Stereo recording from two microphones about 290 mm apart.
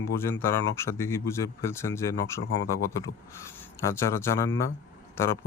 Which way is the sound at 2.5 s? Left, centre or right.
Left.